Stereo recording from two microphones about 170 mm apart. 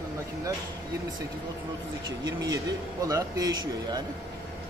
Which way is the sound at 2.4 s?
20° right (ahead or behind).